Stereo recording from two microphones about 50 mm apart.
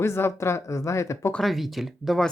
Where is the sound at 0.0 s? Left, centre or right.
Left.